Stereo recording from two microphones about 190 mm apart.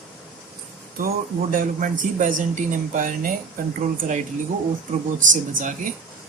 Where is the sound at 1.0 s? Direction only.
45° right (ahead or behind).